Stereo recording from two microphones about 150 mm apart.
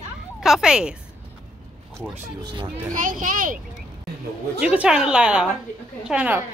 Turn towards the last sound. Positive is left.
turn(degrees=-10)  # may be behind; listen again after turning